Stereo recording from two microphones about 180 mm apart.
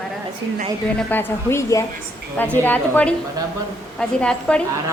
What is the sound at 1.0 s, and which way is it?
A woman's voice, 10° left (ahead or behind).